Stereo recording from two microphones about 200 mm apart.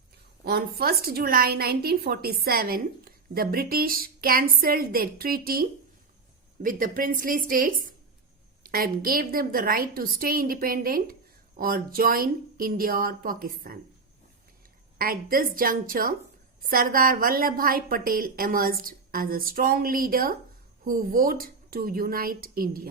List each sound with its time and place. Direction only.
0.4 s a woman's voice: 50° right (ahead or behind)
14.9 s a woman's voice: 45° right (ahead or behind)